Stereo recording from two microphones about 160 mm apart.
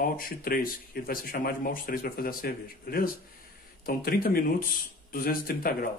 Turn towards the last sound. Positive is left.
turn(degrees=70)  # may be behind; listen again after turning